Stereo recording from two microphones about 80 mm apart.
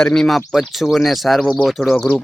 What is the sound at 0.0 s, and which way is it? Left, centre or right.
Speech, centre.